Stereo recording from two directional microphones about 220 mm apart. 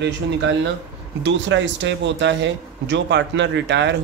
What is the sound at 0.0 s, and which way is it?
Speech, 55° right (ahead or behind).